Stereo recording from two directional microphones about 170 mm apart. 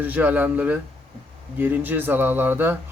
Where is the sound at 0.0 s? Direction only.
10° right (ahead or behind).